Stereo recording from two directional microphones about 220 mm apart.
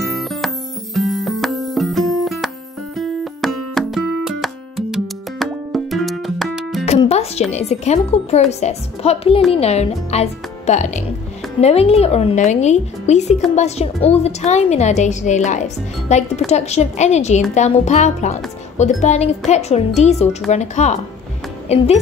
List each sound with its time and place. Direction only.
0.0 s music: centre (ahead or behind)
6.9 s music: 30° left (ahead or behind)
7.5 s a woman's voice: 30° left (ahead or behind)